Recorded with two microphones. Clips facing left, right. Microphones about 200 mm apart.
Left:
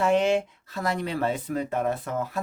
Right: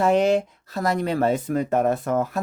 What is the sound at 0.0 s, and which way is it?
Speech, 40° right (ahead or behind).